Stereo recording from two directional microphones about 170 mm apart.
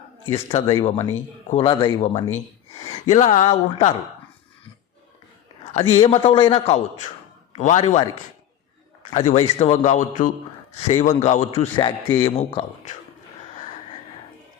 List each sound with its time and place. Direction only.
0.5 s a man's voice: 35° left (ahead or behind)
2.8 s a man's voice: 40° left (ahead or behind)
5.7 s a man's voice: 35° left (ahead or behind)
9.1 s a man's voice: 40° left (ahead or behind)
10.2 s a man's voice: 50° left (ahead or behind); by 12.6 s 30° left (ahead or behind)